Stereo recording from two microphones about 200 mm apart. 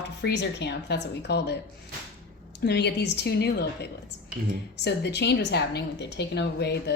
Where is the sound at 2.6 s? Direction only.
55° left (ahead or behind).